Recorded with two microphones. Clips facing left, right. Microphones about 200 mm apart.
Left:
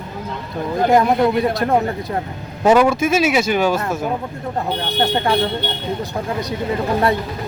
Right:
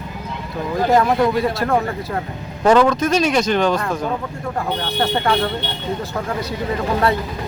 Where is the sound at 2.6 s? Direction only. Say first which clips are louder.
Even; 10° left (ahead or behind).